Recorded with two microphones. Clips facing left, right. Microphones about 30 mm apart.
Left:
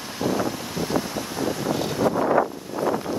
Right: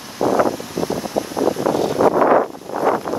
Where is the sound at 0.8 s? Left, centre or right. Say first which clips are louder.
Right 5 dB; centre.